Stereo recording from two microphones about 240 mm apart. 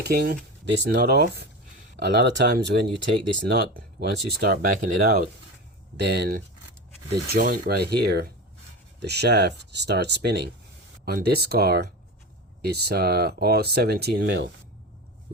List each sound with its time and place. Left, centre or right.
0.0 s speech: right